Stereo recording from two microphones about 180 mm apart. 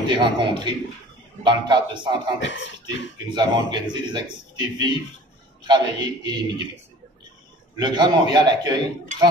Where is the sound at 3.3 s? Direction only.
25° right (ahead or behind).